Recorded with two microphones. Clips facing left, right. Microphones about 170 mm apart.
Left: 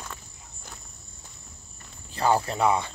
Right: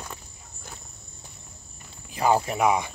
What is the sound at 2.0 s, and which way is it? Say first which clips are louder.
Speech: right 1 dB; 15° right (ahead or behind).